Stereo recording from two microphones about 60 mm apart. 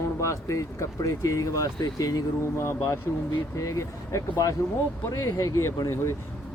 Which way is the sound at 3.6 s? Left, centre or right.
Left.